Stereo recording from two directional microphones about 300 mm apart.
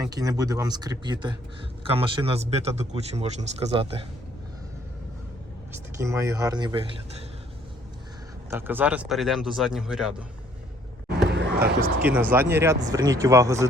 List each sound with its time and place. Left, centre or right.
0.0 s speech: centre
5.7 s speech: centre
8.4 s speech: centre
11.3 s basketball bounce: right
12.3 s speech: centre